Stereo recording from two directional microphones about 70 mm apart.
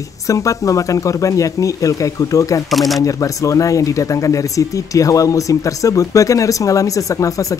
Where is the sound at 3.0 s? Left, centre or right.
Left.